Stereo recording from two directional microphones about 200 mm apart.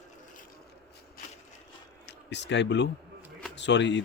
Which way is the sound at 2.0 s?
60° left (ahead or behind).